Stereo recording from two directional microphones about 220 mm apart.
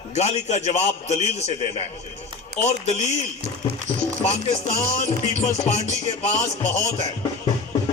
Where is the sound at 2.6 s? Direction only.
30° left (ahead or behind).